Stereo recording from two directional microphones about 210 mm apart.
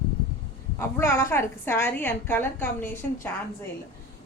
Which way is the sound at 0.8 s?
10° left (ahead or behind).